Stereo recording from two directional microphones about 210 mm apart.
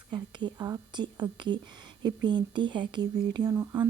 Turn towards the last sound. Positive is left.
turn(degrees=-15)  # may be behind; listen again after turning